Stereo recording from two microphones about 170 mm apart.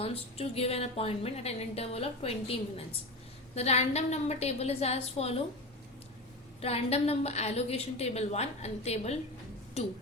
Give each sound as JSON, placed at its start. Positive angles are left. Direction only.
{"t": 0.0, "sound": "a woman's voice", "side_deg": 35}
{"t": 6.6, "sound": "a woman's voice", "side_deg": 35}